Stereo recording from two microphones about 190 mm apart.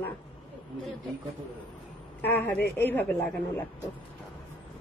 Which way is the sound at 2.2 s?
10° left (ahead or behind).